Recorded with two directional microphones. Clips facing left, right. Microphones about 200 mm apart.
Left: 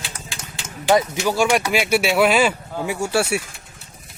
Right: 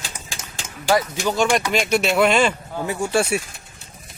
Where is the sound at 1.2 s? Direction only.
10° left (ahead or behind).